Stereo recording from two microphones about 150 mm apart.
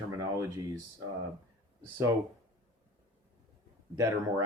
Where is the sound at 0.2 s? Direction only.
20° right (ahead or behind).